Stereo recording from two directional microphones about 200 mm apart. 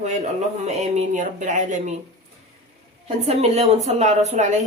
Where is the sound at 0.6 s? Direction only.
35° right (ahead or behind).